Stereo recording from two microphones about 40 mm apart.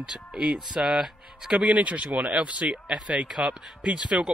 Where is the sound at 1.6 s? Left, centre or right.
Right.